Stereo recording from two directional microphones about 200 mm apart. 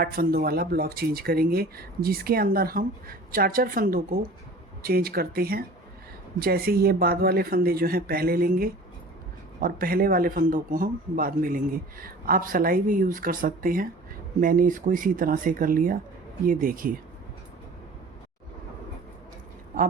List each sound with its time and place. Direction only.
0.0 s a man's voice: 45° right (ahead or behind)